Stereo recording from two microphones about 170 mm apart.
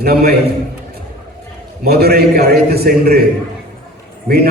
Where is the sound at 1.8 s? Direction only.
65° right (ahead or behind).